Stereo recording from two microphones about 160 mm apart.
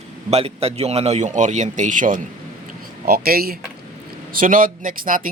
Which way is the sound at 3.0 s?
70° right (ahead or behind).